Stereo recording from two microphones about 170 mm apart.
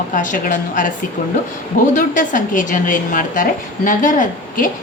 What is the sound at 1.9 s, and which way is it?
A woman's voice, 50° left (ahead or behind).